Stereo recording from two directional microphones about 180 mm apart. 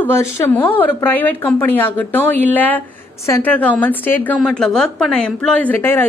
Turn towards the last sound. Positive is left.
turn(degrees=10)  # may be behind; listen again after turning